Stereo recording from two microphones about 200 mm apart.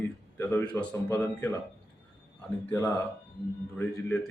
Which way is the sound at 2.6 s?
10° left (ahead or behind).